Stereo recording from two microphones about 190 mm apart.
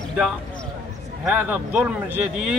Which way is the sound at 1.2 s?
10° right (ahead or behind).